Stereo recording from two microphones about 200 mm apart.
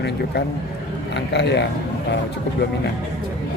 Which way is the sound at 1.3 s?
60° left (ahead or behind).